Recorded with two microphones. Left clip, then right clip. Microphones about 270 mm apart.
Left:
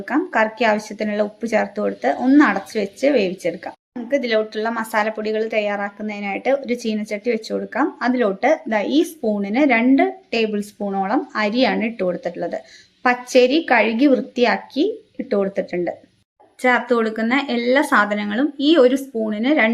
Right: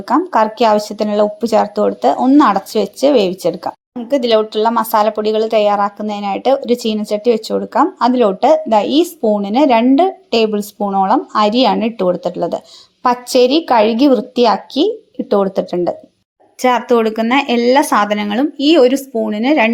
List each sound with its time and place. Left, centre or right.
0.3 s speech: right